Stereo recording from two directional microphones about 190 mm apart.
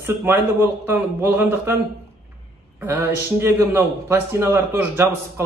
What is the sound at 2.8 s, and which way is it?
A man's voice, 10° right (ahead or behind).